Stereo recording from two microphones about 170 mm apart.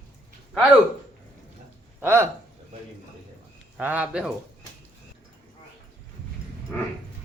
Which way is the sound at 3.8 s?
10° right (ahead or behind).